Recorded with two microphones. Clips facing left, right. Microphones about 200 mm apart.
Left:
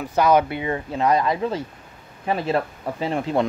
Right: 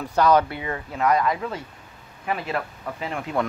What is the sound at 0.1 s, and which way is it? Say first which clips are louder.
Speech: left 1 dB; 15° left (ahead or behind).